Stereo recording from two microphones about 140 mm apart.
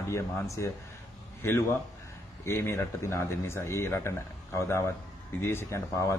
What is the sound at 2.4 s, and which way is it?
A man's voice, 20° left (ahead or behind).